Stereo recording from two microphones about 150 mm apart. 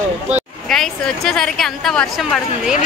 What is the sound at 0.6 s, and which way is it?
A woman's voice, 5° left (ahead or behind).